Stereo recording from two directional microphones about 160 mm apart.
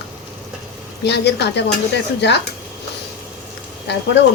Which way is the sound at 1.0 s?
90° left.